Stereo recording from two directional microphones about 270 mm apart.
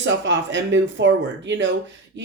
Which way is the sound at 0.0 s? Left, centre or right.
Right.